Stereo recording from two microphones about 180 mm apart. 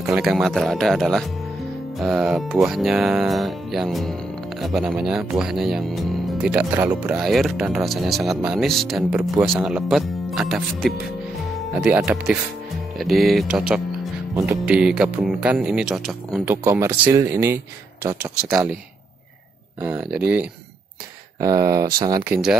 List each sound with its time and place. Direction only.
0.0 s speech: centre (ahead or behind)
16.4 s speech: 15° right (ahead or behind)
19.8 s speech: 10° right (ahead or behind)
21.4 s speech: 20° right (ahead or behind)